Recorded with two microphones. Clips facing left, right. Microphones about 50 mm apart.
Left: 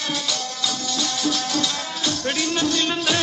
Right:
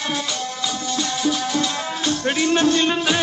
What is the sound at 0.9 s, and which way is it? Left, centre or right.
Music, right.